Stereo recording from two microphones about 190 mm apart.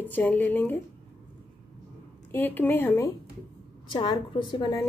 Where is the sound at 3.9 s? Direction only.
25° left (ahead or behind).